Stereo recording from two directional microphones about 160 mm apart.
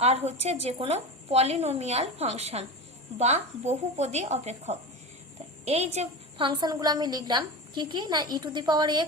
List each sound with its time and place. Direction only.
0.0 s a woman's voice: 40° right (ahead or behind)